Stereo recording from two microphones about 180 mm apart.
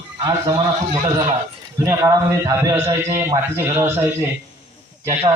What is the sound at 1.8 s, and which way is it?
A man's voice, 15° right (ahead or behind).